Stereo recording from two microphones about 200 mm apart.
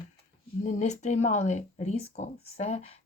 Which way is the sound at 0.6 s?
35° left (ahead or behind).